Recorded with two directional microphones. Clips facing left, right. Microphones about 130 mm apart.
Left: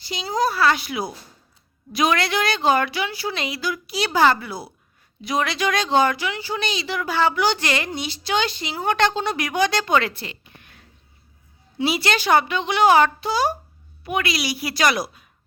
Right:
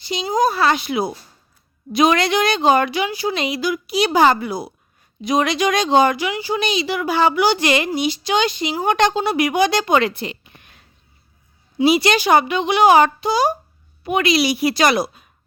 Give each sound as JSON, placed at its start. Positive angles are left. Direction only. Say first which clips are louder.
{"t": 0.0, "sound": "a woman's voice", "louder": "right 4 dB", "side_deg": -20}
{"t": 11.8, "sound": "a woman's voice", "louder": "right 7 dB", "side_deg": -15}